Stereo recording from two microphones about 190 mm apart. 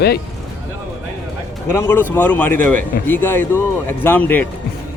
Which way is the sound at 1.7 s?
10° left (ahead or behind).